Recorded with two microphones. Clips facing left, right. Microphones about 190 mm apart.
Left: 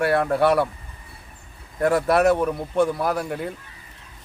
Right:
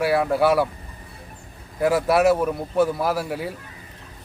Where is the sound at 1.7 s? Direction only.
5° right (ahead or behind).